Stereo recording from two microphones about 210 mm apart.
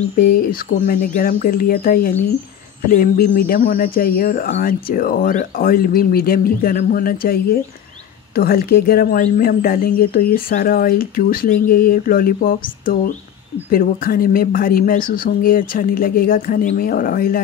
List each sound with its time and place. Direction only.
0.2 s speech: 45° left (ahead or behind)
8.4 s speech: 45° left (ahead or behind)